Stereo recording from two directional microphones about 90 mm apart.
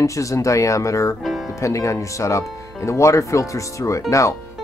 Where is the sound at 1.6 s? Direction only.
35° left (ahead or behind).